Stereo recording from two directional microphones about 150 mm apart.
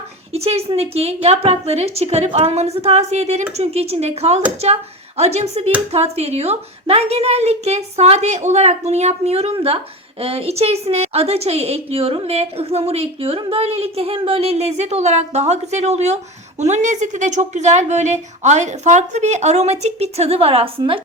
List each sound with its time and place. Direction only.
0.3 s a woman's voice: 40° right (ahead or behind)